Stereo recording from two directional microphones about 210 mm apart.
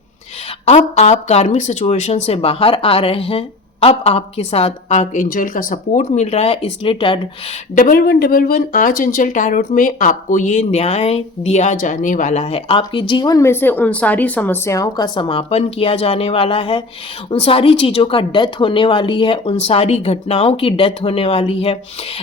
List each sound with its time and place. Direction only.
0.6 s speech: 30° left (ahead or behind)
7.8 s speech: 45° left (ahead or behind); by 21.8 s 25° left (ahead or behind)